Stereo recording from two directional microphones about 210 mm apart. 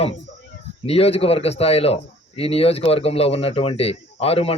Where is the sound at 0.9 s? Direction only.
30° left (ahead or behind).